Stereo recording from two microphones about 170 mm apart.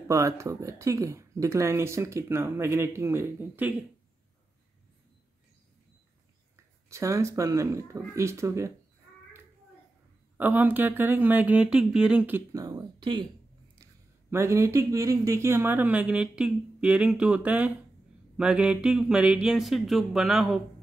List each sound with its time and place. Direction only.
0.1 s speech: 15° right (ahead or behind)
6.9 s speech: 15° right (ahead or behind)
10.3 s speech: 10° right (ahead or behind)
12.5 s speech: 25° right (ahead or behind)
14.3 s speech: 15° right (ahead or behind)